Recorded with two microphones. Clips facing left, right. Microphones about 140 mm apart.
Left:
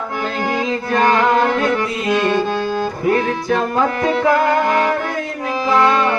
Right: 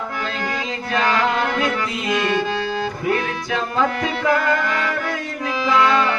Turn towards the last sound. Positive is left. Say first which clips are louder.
# left 6 dB
turn(degrees=45)  # may be behind; listen again after turning